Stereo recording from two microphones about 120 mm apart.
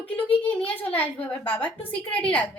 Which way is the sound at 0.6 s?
50° left (ahead or behind).